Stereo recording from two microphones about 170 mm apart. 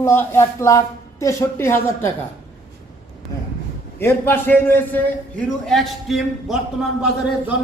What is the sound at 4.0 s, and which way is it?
Speech, 15° left (ahead or behind).